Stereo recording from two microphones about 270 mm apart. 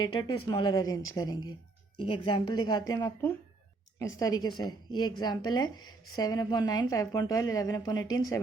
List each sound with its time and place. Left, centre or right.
0.0 s a woman's voice: centre